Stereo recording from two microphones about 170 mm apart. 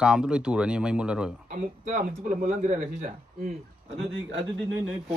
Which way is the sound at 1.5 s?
50° right (ahead or behind).